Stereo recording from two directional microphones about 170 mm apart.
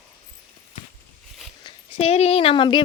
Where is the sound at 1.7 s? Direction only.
35° left (ahead or behind).